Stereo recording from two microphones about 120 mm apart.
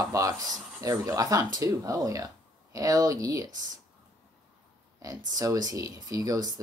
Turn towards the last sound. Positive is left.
turn(degrees=-35)  # may be behind; listen again after turning